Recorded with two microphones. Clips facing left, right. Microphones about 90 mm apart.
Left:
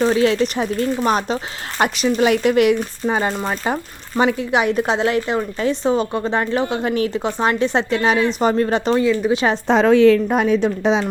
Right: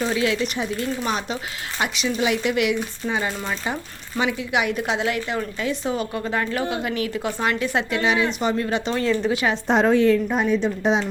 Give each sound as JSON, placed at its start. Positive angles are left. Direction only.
{"t": 0.0, "sound": "speech", "side_deg": 40}
{"t": 7.1, "sound": "speech", "side_deg": 20}
{"t": 9.3, "sound": "a woman's voice", "side_deg": 30}
{"t": 9.6, "sound": "a woman's voice", "side_deg": 90}